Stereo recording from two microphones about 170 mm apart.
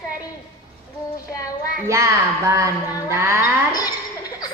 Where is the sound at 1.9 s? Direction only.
15° right (ahead or behind).